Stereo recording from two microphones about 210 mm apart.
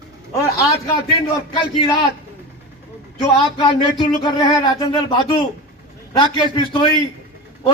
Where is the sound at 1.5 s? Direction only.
20° left (ahead or behind).